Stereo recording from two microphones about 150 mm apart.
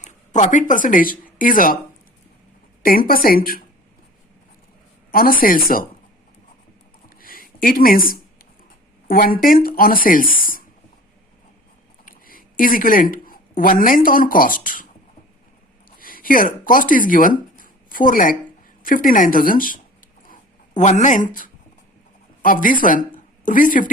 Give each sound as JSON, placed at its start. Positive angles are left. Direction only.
{"t": 0.0, "sound": "speech", "side_deg": 55}
{"t": 2.8, "sound": "speech", "side_deg": 70}
{"t": 5.1, "sound": "speech", "side_deg": 75}
{"t": 7.2, "sound": "a sound", "side_deg": 75}
{"t": 9.0, "sound": "speech", "side_deg": 75}
{"t": 12.0, "sound": "a sound", "side_deg": 70}
{"t": 13.6, "sound": "speech", "side_deg": 65}
{"t": 16.0, "sound": "a woman's voice", "side_deg": 70}
{"t": 20.2, "sound": "zipper", "side_deg": 60}
{"t": 22.4, "sound": "speech", "side_deg": 65}